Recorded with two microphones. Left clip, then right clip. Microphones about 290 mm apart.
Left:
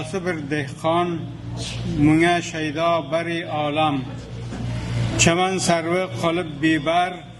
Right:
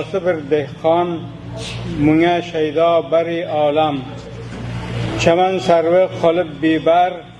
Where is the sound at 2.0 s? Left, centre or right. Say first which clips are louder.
Right 3 dB; left.